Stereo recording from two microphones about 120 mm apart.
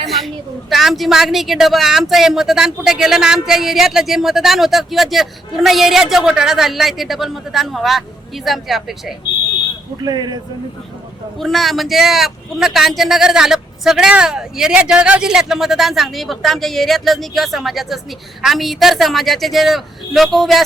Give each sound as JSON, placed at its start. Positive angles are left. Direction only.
{"t": 0.0, "sound": "a sound", "side_deg": 0}
{"t": 0.7, "sound": "a woman's voice", "side_deg": 0}
{"t": 10.0, "sound": "speech", "side_deg": -35}
{"t": 11.3, "sound": "a woman's voice", "side_deg": 0}